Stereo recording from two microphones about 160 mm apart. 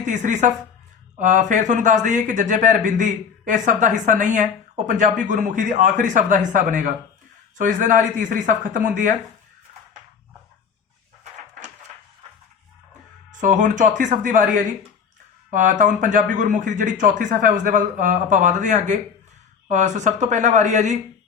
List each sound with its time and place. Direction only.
0.0 s speech: 50° right (ahead or behind)
13.3 s speech: 50° right (ahead or behind)